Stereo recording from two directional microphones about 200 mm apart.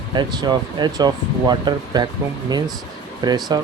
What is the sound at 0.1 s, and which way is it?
Speech, 20° right (ahead or behind).